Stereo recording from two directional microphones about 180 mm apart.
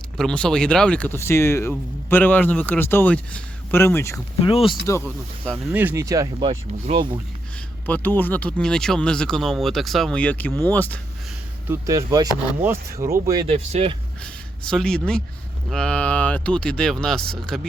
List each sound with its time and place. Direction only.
0.2 s speech: 5° left (ahead or behind)
4.4 s speech: 30° left (ahead or behind)
5.7 s speech: 10° right (ahead or behind)
6.5 s speech: 35° right (ahead or behind)
7.9 s speech: 10° left (ahead or behind)
11.7 s speech: 20° right (ahead or behind)
13.5 s speech: 35° right (ahead or behind)
14.2 s speech: 5° left (ahead or behind)